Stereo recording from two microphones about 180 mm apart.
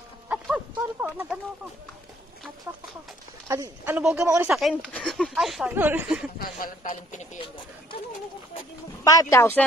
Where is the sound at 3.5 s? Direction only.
15° right (ahead or behind).